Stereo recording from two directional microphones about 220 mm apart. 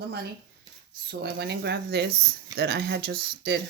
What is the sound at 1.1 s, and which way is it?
Speech, 45° right (ahead or behind).